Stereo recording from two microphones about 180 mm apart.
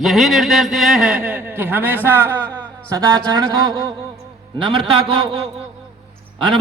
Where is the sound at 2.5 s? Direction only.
20° right (ahead or behind).